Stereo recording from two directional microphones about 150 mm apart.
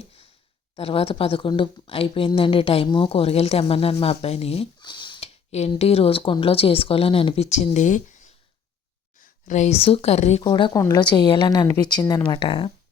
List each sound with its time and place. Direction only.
0.8 s a woman's voice: 40° left (ahead or behind)
4.8 s a sound: 30° left (ahead or behind)
5.5 s a woman's voice: 45° left (ahead or behind)
10.4 s a woman's voice: 30° left (ahead or behind)